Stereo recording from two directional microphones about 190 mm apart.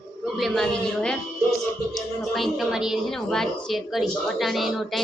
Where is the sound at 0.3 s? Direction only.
Centre (ahead or behind).